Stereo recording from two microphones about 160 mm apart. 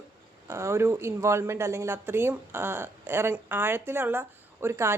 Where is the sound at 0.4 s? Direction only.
15° right (ahead or behind).